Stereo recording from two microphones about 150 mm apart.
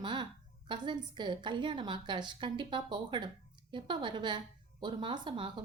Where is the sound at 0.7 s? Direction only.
30° right (ahead or behind).